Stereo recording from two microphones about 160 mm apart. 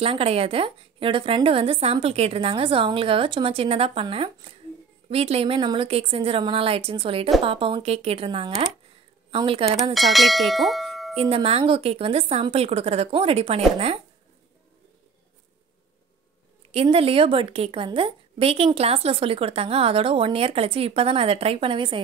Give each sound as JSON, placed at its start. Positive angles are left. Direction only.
{"t": 0.0, "sound": "a woman's voice", "side_deg": -35}
{"t": 9.9, "sound": "speech", "side_deg": 0}
{"t": 11.1, "sound": "a woman's voice", "side_deg": -35}
{"t": 16.7, "sound": "a woman's voice", "side_deg": -35}